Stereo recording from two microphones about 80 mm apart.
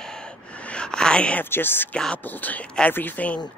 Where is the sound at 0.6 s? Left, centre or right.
Centre.